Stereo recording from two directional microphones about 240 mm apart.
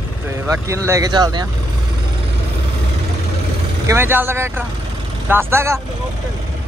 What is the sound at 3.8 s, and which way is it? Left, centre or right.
Speech, centre.